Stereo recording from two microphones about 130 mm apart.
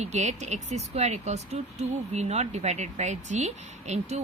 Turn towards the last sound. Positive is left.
turn(degrees=-60)  # may be behind; listen again after turning